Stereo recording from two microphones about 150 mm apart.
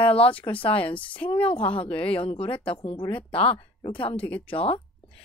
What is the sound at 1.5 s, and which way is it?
Speech, 35° left (ahead or behind).